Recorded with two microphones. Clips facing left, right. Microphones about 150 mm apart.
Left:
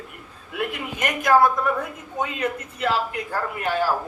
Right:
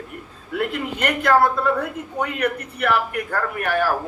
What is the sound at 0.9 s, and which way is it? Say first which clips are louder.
A woman's voice: even; 15° left (ahead or behind).